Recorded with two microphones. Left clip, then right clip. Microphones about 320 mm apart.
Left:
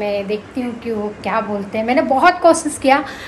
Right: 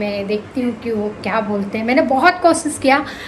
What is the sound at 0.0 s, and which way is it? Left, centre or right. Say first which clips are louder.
A woman's voice: left 1 dB; centre.